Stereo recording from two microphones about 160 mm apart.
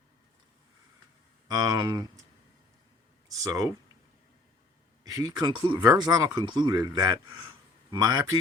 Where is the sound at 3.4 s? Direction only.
20° right (ahead or behind).